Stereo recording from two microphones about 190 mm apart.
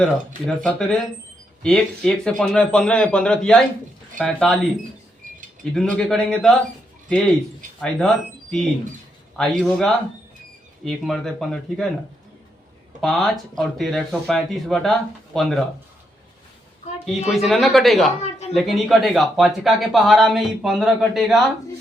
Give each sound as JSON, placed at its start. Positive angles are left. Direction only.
{"t": 0.0, "sound": "speech", "side_deg": 5}
{"t": 5.7, "sound": "speech", "side_deg": 5}
{"t": 7.8, "sound": "speech", "side_deg": 5}
{"t": 13.0, "sound": "speech", "side_deg": 0}
{"t": 17.2, "sound": "speech", "side_deg": 0}
{"t": 18.2, "sound": "a sound", "side_deg": 35}
{"t": 18.5, "sound": "speech", "side_deg": 0}